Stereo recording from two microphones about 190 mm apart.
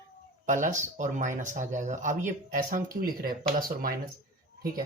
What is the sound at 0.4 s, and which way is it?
Speech, 45° right (ahead or behind).